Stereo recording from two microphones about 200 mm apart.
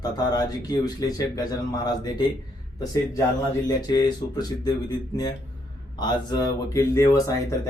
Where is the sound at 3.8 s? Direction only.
20° left (ahead or behind).